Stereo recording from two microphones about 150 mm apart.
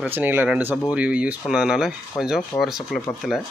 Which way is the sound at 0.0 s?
10° right (ahead or behind).